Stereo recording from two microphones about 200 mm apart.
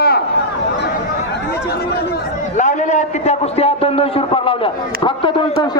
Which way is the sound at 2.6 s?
35° left (ahead or behind).